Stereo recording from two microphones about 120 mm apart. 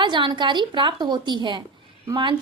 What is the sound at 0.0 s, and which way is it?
A woman's voice, 40° right (ahead or behind).